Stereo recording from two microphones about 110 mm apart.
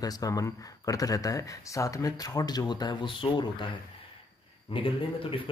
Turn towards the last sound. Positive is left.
turn(degrees=55)  # may be behind; listen again after turning